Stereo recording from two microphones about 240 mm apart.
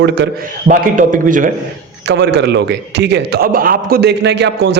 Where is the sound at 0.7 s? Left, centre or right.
Right.